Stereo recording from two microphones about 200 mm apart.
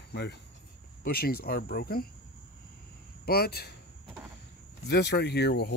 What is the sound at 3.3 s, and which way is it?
Speech, 50° left (ahead or behind).